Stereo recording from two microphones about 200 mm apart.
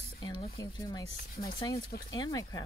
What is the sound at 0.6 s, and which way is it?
Speech, 15° left (ahead or behind).